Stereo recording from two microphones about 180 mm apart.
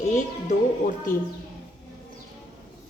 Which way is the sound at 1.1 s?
50° left (ahead or behind).